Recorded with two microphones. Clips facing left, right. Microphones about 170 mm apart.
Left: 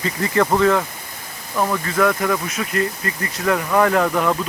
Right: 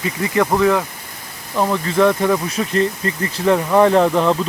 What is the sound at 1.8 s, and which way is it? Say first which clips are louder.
Speech: right 5 dB; 25° right (ahead or behind).